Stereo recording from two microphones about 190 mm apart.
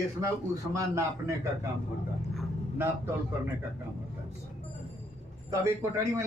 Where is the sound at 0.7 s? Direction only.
15° right (ahead or behind).